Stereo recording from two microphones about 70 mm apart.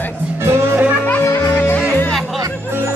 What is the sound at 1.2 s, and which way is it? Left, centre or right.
Music, left.